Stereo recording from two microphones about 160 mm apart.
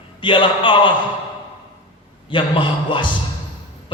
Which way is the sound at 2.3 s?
30° left (ahead or behind).